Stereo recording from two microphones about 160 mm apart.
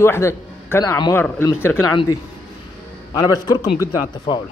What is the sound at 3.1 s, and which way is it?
A man's voice, 25° left (ahead or behind).